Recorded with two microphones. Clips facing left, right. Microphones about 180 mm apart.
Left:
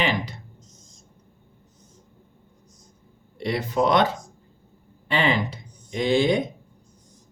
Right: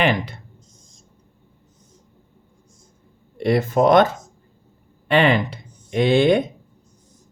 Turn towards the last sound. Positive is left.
turn(degrees=-65)  # may be behind; listen again after turning